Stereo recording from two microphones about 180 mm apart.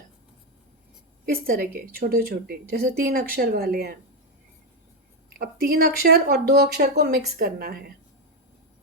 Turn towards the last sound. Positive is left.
turn(degrees=-55)  # may be behind; listen again after turning